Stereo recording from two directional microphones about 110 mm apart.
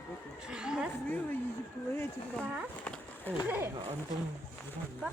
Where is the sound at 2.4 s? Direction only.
15° right (ahead or behind).